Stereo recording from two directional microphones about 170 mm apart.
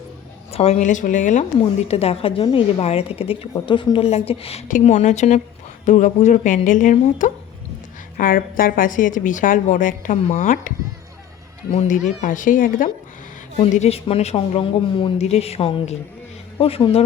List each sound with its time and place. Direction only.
0.5 s a woman's voice: 35° left (ahead or behind)
1.6 s a woman's voice: 35° left (ahead or behind)
11.7 s a woman's voice: 45° left (ahead or behind)
13.6 s speech: 35° left (ahead or behind)